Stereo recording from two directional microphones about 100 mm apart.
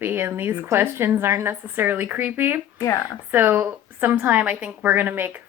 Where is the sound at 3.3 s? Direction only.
20° right (ahead or behind).